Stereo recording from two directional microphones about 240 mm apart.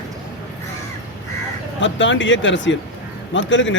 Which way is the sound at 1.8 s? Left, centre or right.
Left.